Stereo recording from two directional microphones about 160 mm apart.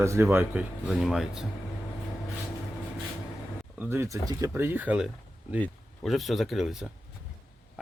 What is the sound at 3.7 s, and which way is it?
Speech, 10° right (ahead or behind).